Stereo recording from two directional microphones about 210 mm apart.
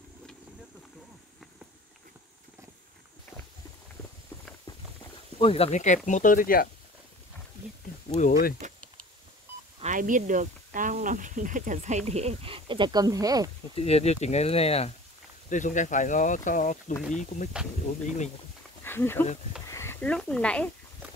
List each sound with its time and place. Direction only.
5.4 s speech: 30° left (ahead or behind); by 6.7 s 45° left (ahead or behind)
8.1 s speech: 35° left (ahead or behind)
8.6 s a sound: 35° right (ahead or behind)
9.8 s speech: 35° right (ahead or behind); by 13.5 s 15° right (ahead or behind)
13.7 s speech: 30° left (ahead or behind)
18.9 s speech: 10° left (ahead or behind)